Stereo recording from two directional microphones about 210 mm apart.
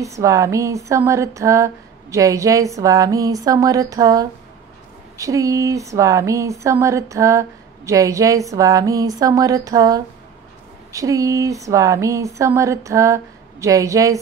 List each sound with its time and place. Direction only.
0.0 s speech: 15° right (ahead or behind)